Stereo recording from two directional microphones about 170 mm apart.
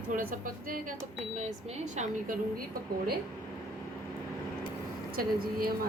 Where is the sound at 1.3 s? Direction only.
45° right (ahead or behind).